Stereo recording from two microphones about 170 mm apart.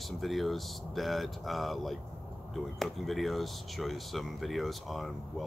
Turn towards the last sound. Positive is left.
turn(degrees=0)  # may be behind; listen again after turning